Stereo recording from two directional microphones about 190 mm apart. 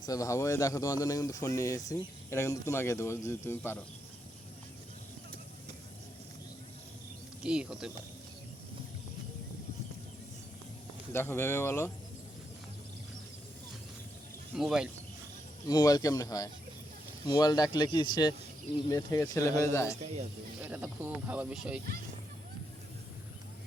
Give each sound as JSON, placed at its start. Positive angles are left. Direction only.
{"t": 0.0, "sound": "speech", "side_deg": 20}
{"t": 7.4, "sound": "speech", "side_deg": -5}
{"t": 11.1, "sound": "speech", "side_deg": 10}
{"t": 14.5, "sound": "speech", "side_deg": 0}
{"t": 15.6, "sound": "speech", "side_deg": 20}
{"t": 20.6, "sound": "speech", "side_deg": -5}